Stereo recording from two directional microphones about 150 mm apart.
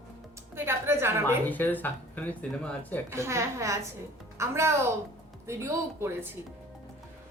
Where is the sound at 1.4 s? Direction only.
10° left (ahead or behind).